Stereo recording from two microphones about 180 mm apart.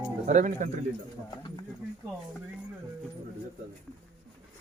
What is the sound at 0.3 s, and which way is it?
Speech, 45° right (ahead or behind).